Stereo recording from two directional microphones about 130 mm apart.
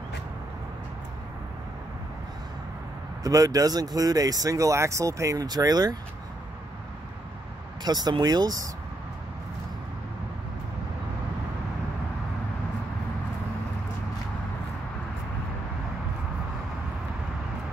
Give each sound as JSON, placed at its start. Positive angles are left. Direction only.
{"t": 3.3, "sound": "speech", "side_deg": -25}
{"t": 7.8, "sound": "speech", "side_deg": -30}